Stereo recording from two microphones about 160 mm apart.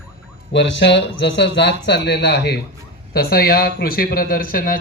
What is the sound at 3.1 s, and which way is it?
Speech, 75° left (ahead or behind).